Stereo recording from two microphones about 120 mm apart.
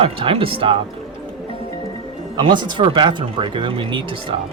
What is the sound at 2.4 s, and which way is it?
Speech, 40° right (ahead or behind).